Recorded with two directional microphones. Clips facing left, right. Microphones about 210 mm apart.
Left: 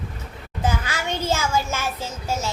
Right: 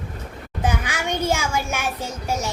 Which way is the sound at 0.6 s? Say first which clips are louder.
Right 1 dB; 15° right (ahead or behind).